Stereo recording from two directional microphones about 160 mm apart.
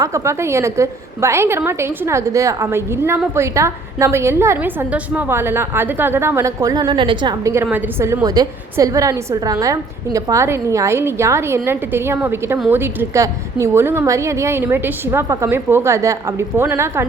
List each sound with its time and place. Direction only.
0.0 s a woman's voice: 20° right (ahead or behind)